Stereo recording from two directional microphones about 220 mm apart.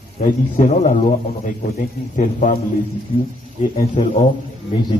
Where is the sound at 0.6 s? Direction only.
35° left (ahead or behind).